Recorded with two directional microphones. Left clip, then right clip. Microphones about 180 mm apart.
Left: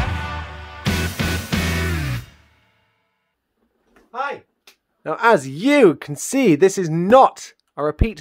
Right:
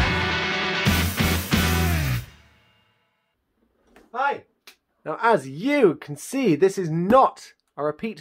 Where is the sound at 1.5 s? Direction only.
Centre (ahead or behind).